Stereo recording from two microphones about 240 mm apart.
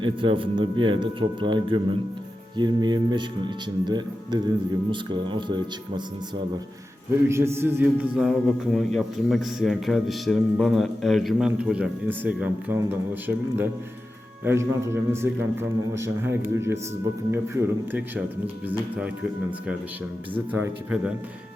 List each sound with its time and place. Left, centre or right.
0.0 s speech: right
7.3 s a man's voice: centre